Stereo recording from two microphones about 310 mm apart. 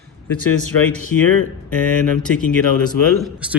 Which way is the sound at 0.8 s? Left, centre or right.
Centre.